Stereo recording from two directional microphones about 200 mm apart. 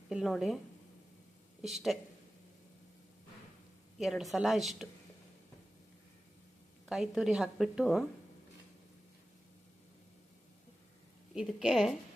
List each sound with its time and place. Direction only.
0.1 s a woman's voice: centre (ahead or behind)
1.6 s a woman's voice: centre (ahead or behind)
3.9 s a woman's voice: centre (ahead or behind)
6.8 s a woman's voice: centre (ahead or behind)
11.3 s a woman's voice: centre (ahead or behind)